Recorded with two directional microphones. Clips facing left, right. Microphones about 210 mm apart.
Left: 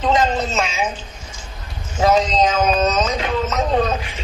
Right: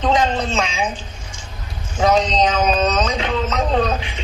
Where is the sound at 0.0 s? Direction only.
5° left (ahead or behind).